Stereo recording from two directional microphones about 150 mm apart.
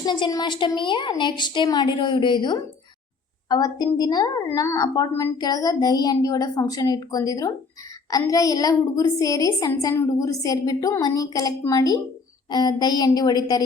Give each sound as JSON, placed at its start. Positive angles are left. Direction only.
{"t": 0.0, "sound": "a woman's voice", "side_deg": 30}